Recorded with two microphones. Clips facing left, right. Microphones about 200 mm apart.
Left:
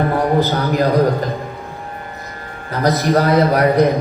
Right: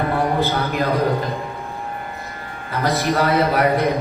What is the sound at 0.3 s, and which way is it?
Speech, 40° left (ahead or behind).